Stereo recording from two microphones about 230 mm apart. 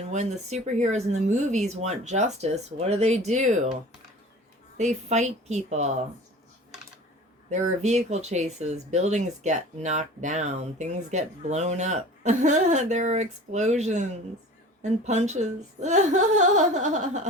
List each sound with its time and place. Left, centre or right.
0.1 s speech: right
4.8 s speech: right
7.5 s speech: right